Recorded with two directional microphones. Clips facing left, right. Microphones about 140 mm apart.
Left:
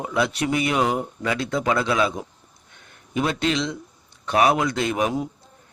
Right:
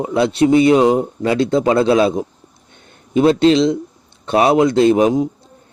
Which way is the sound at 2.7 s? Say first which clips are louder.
Right 10 dB; 30° right (ahead or behind).